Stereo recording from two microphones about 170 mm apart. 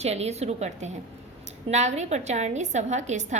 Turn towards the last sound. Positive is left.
turn(degrees=-45)  # may be behind; listen again after turning